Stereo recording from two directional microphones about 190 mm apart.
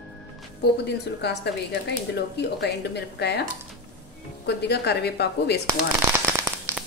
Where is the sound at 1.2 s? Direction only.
65° left (ahead or behind).